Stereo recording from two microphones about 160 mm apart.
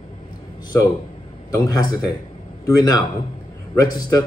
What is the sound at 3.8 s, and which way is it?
Speech, 25° left (ahead or behind).